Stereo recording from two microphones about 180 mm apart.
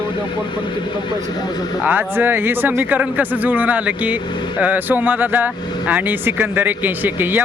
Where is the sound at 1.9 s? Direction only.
10° right (ahead or behind).